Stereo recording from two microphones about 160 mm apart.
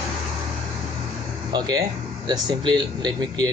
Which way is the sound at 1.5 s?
25° right (ahead or behind).